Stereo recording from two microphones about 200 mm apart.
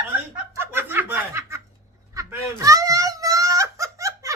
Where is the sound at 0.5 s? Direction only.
10° right (ahead or behind).